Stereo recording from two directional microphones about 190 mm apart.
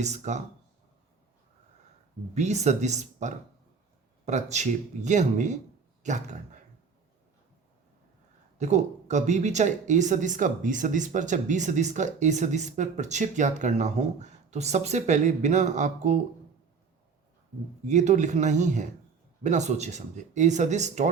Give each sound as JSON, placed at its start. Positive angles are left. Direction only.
{"t": 0.0, "sound": "speech", "side_deg": -35}
{"t": 2.3, "sound": "speech", "side_deg": -35}
{"t": 8.5, "sound": "speech", "side_deg": -40}
{"t": 17.8, "sound": "speech", "side_deg": -40}